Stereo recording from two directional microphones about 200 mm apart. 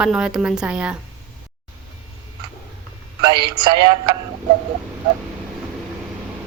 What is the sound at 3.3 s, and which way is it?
Speech, 20° right (ahead or behind).